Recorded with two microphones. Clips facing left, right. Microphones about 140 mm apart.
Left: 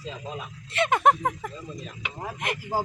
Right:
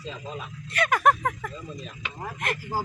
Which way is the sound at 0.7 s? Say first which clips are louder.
Left 1 dB; 25° left (ahead or behind).